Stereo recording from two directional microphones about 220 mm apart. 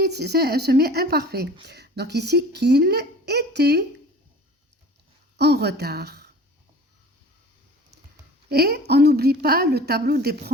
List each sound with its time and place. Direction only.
0.0 s speech: 50° right (ahead or behind)
5.4 s speech: 50° right (ahead or behind)
8.4 s speech: 45° right (ahead or behind)